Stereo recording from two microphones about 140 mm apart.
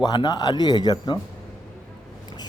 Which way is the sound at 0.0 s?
30° left (ahead or behind).